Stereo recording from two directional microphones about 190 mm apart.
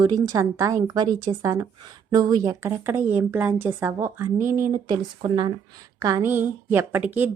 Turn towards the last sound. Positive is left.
turn(degrees=-10)  # may be behind; listen again after turning